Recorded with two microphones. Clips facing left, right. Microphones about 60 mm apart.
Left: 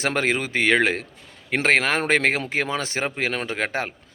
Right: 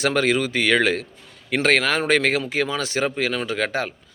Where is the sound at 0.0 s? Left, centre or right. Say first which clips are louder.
Right 3 dB; left.